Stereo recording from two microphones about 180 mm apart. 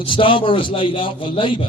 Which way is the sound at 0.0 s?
30° left (ahead or behind).